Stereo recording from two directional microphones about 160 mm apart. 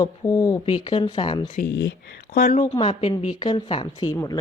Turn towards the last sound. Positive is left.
turn(degrees=25)  # may be behind; listen again after turning